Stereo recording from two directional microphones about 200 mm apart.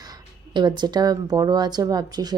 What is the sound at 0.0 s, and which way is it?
Speech, 20° right (ahead or behind).